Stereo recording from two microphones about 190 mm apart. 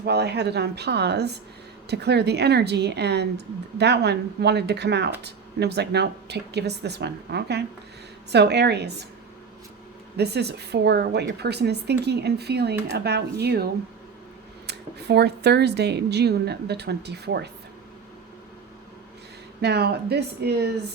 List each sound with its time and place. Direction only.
0.0 s a woman's voice: 60° right (ahead or behind)
10.2 s a woman's voice: 60° right (ahead or behind)
14.7 s a woman's voice: 60° right (ahead or behind)
19.6 s a woman's voice: 60° right (ahead or behind)